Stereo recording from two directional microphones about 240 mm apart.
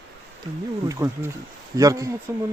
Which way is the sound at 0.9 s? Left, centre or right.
Centre.